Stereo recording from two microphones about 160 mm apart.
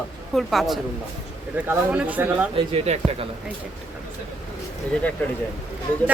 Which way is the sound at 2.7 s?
40° right (ahead or behind).